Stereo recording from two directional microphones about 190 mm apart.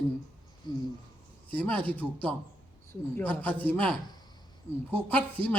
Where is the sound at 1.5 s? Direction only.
10° left (ahead or behind).